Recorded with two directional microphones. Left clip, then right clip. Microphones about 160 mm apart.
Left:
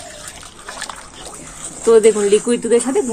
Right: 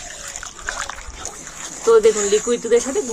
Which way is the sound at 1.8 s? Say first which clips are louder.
Left 3 dB; 40° left (ahead or behind).